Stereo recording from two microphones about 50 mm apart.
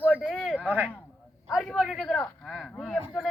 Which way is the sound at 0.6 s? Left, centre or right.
Right.